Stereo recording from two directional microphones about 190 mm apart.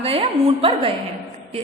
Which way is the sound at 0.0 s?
30° right (ahead or behind).